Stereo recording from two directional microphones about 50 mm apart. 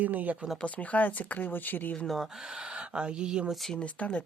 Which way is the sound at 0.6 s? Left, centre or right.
Left.